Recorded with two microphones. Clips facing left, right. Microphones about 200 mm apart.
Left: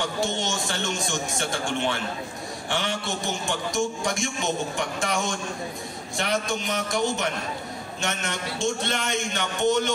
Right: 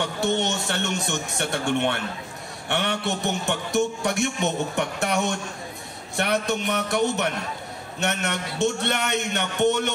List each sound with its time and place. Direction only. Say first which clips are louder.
0.0 s a man's voice: right 3 dB; 65° right (ahead or behind)